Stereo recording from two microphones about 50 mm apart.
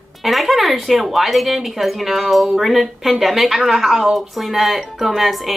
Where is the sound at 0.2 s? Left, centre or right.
Centre.